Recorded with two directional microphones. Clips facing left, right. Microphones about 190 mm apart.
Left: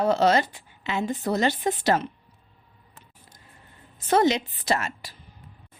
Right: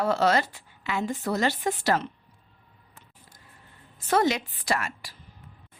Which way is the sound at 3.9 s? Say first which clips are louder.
Left 3 dB; 20° left (ahead or behind).